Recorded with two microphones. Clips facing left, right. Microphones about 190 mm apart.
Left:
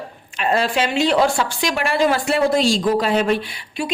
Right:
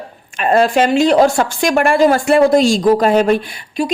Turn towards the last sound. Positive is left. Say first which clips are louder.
# right 6 dB
turn(degrees=-45)  # may be behind; listen again after turning